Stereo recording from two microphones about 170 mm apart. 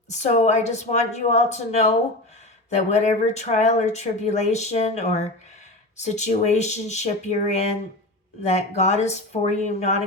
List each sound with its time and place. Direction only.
0.1 s speech: 45° left (ahead or behind)